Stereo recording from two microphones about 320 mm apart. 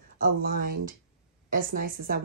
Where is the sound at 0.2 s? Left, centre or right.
Right.